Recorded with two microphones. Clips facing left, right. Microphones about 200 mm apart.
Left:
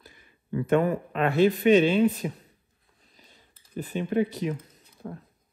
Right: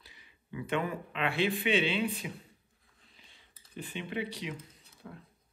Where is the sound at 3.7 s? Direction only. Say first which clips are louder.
Left 11 dB; 40° left (ahead or behind).